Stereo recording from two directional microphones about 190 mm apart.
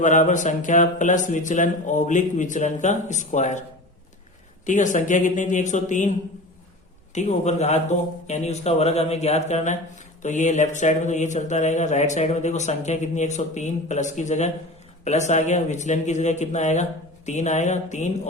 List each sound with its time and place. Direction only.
0.0 s speech: 40° left (ahead or behind)
4.6 s speech: 40° left (ahead or behind)